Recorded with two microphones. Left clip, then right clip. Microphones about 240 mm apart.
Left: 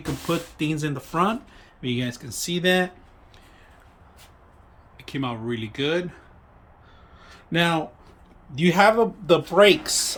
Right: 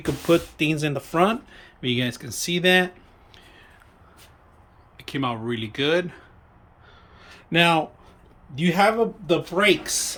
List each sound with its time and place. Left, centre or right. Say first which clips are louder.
0.3 s speech: right 6 dB; centre
4.9 s speech: right 3 dB; centre
7.2 s a sound: right 3 dB; centre
8.5 s speech: left 2 dB; centre